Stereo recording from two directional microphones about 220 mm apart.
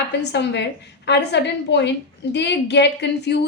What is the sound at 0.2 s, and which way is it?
A woman's voice, 50° left (ahead or behind).